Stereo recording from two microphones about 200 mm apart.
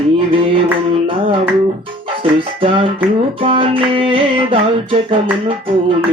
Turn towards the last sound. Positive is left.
turn(degrees=-25)  # may be behind; listen again after turning